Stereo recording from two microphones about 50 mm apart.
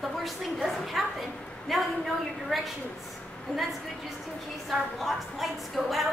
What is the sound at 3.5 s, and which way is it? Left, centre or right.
Speech, left.